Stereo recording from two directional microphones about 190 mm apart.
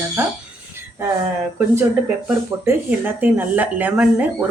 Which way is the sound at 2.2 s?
10° right (ahead or behind).